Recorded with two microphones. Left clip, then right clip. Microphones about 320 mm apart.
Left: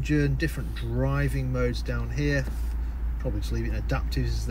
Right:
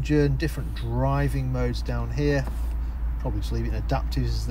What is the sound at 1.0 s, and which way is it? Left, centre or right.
Speech, centre.